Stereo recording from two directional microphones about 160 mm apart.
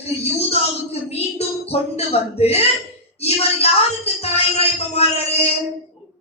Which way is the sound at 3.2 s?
40° left (ahead or behind).